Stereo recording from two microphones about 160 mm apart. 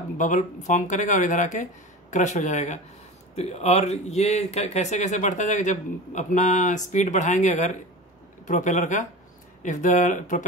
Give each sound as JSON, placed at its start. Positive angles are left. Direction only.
{"t": 0.2, "sound": "speech", "side_deg": 50}